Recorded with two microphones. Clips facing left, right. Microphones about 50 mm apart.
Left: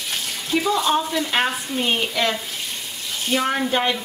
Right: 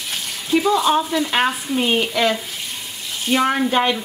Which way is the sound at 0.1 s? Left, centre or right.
Centre.